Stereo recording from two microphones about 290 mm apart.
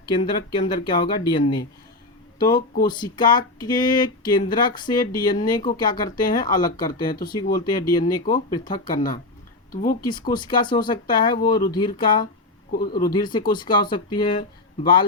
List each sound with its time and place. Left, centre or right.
0.0 s speech: centre
12.7 s speech: left
13.0 s speech: centre